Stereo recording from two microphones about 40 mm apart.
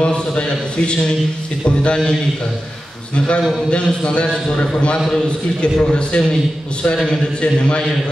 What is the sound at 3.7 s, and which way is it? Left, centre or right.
Speech, left.